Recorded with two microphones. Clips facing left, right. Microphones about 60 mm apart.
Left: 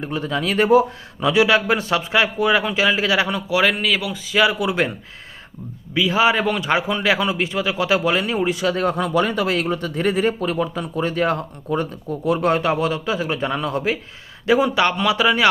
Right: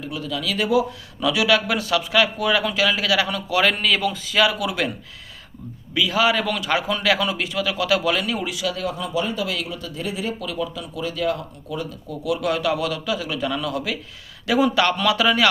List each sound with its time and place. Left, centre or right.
0.0 s speech: left
3.6 s a man's voice: centre; by 4.9 s left
5.9 s a man's voice: left